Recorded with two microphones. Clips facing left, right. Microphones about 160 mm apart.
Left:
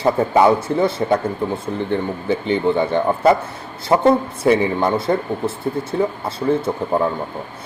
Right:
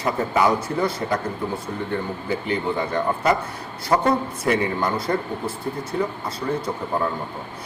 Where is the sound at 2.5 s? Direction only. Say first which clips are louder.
Left 7 dB; 25° left (ahead or behind).